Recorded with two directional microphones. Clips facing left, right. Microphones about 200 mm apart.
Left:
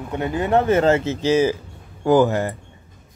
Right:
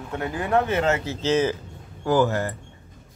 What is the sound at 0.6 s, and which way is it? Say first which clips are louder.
Speech: left 6 dB; 45° left (ahead or behind).